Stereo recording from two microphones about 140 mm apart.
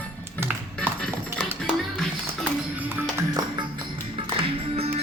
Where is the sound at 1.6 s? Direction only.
5° left (ahead or behind).